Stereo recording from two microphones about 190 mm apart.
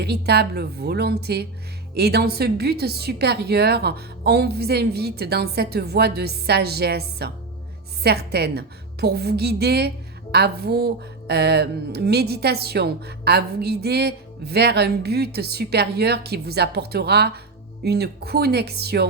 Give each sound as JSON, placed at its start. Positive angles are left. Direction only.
{"t": 0.0, "sound": "speech", "side_deg": -60}